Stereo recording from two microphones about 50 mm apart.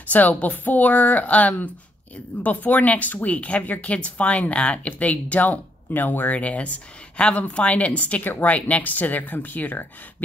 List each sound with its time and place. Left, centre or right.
0.0 s speech: left